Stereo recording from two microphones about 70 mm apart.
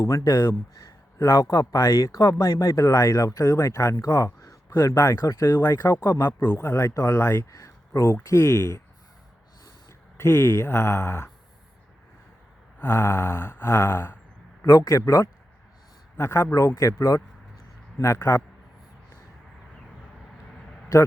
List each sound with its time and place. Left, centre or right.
0.0 s speech: left
0.8 s speech: left
5.2 s speech: left
5.5 s speech: left
10.2 s speech: left
12.8 s speech: left
14.6 s speech: left
20.9 s speech: left